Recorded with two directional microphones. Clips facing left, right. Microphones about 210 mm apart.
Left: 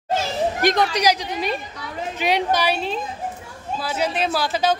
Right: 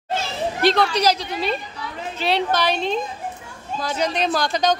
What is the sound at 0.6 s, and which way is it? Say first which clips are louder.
A woman's voice: right 4 dB; 15° left (ahead or behind).